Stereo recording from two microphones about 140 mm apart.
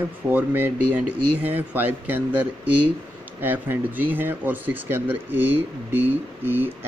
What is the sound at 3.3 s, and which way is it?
Speech, 15° right (ahead or behind).